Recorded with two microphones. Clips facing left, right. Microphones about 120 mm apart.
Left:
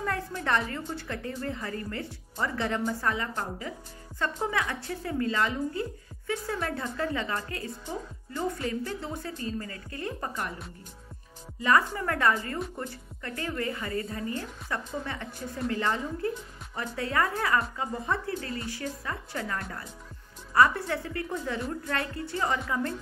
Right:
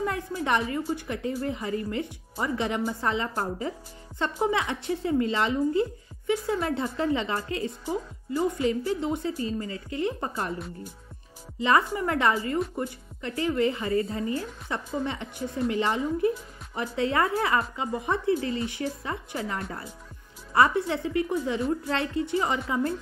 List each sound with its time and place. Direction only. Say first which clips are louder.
0.0 s a woman's voice: right 3 dB; 15° right (ahead or behind)
7.8 s a woman's voice: right 6 dB; 10° right (ahead or behind)
8.6 s speech: right 7 dB; 20° right (ahead or behind)
11.6 s a woman's voice: right 2 dB; 20° right (ahead or behind)